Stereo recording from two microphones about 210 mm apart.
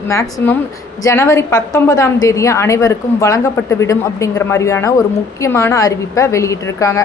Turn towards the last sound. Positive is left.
turn(degrees=15)  # may be behind; listen again after turning